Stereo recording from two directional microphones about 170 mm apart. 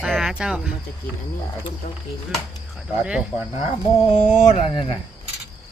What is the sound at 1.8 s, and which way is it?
Speech, 40° left (ahead or behind).